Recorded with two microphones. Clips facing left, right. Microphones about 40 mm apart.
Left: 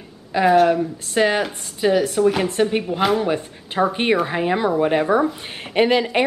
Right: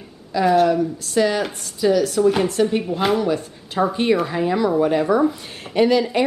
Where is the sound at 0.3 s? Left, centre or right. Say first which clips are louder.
Left 1 dB; left.